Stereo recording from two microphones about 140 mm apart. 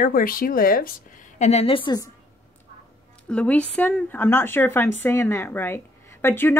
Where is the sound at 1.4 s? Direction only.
50° left (ahead or behind).